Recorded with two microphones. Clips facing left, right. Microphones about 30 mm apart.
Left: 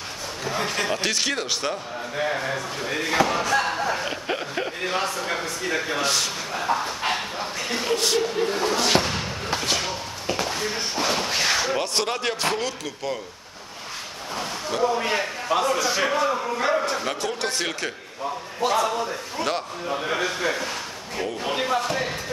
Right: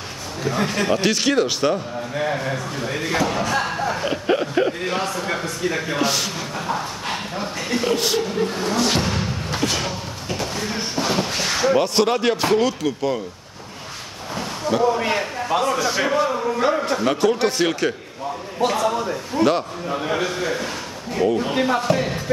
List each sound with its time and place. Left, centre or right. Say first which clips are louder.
0.4 s a man's voice: right 4 dB; centre
7.3 s music: right 3 dB; centre
9.7 s a sound: right 1 dB; centre
11.5 s a man's voice: right 6 dB; centre
14.3 s a man's voice: right 5 dB; centre